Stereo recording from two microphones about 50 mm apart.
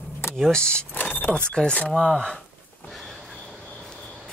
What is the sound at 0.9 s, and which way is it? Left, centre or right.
Vehicle, left.